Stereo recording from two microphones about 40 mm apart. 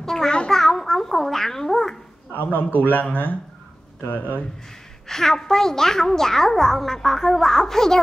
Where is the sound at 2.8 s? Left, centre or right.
Left.